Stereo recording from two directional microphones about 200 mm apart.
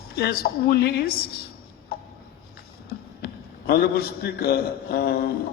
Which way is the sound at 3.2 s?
50° left (ahead or behind).